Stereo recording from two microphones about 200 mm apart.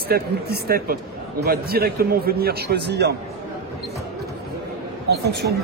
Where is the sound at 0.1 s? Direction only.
50° right (ahead or behind).